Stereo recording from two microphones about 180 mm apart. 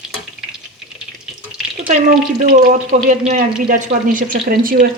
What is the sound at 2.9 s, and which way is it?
A woman's voice, 45° right (ahead or behind).